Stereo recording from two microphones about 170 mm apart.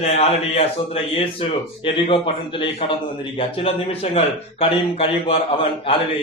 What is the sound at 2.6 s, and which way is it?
A man's voice, 30° left (ahead or behind).